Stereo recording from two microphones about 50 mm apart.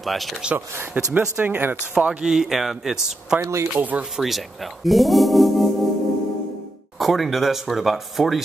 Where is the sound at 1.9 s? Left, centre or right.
Centre.